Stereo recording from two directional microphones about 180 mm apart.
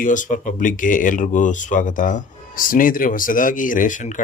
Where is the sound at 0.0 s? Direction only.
45° left (ahead or behind).